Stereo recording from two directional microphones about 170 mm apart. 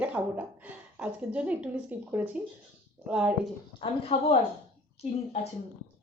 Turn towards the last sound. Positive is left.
turn(degrees=35)  # may be behind; listen again after turning